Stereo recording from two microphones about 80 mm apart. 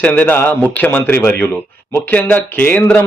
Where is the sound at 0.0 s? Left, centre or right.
Centre.